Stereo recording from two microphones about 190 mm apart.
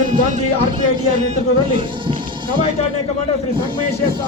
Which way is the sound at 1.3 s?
25° right (ahead or behind).